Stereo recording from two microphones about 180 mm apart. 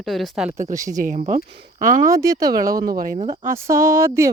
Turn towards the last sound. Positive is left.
turn(degrees=-15)  # may be behind; listen again after turning